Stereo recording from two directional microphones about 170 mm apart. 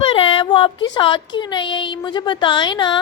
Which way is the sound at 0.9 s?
30° left (ahead or behind).